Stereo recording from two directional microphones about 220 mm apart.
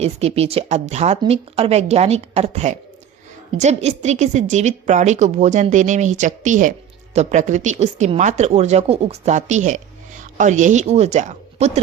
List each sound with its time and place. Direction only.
0.0 s a woman's voice: 30° right (ahead or behind)